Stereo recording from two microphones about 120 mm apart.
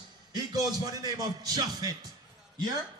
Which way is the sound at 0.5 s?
30° right (ahead or behind).